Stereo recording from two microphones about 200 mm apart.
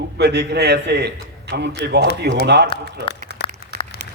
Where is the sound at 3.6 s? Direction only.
50° left (ahead or behind).